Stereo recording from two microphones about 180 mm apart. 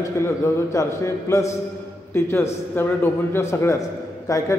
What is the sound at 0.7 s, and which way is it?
A man's voice, 15° left (ahead or behind).